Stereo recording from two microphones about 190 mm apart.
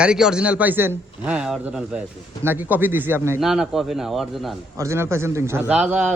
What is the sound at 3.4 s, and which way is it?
A man's voice, centre (ahead or behind).